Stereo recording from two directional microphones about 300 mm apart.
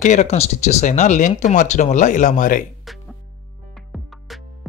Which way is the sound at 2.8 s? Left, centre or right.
Centre.